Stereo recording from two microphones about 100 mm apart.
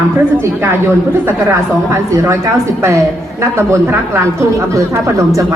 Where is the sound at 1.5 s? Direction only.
25° right (ahead or behind).